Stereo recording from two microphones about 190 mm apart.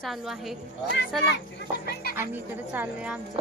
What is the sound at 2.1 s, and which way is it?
Speech, 10° right (ahead or behind).